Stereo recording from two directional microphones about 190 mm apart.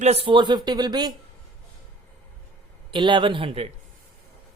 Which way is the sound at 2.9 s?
25° right (ahead or behind).